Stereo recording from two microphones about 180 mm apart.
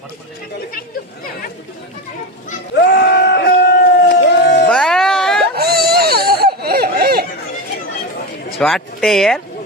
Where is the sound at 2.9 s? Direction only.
70° left (ahead or behind).